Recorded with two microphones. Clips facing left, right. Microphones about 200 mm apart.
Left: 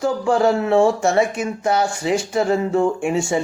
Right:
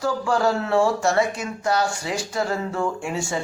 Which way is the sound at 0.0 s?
20° left (ahead or behind).